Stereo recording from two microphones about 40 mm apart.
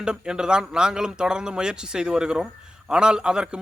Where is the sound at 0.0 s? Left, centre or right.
Right.